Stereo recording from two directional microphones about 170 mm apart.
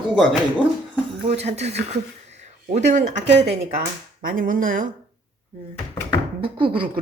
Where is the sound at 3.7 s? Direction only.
55° right (ahead or behind).